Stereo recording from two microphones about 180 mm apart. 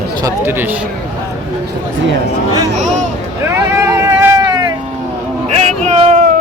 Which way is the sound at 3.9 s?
15° right (ahead or behind).